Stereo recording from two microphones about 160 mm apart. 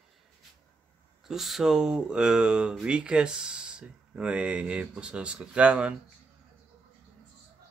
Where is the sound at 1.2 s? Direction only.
Centre (ahead or behind).